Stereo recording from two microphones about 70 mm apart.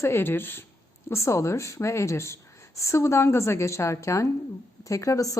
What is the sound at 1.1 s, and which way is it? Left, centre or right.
Speech, left.